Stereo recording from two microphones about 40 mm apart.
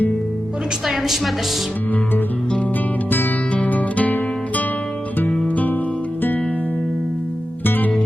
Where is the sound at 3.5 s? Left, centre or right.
Left.